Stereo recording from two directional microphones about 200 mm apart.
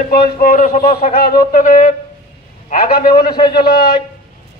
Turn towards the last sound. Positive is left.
turn(degrees=50)  # may be behind; listen again after turning